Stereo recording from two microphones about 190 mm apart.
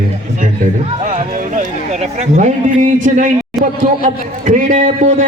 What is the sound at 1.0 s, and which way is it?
A man's voice, 40° right (ahead or behind).